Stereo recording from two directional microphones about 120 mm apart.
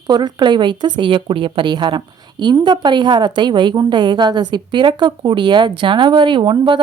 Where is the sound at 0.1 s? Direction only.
40° right (ahead or behind).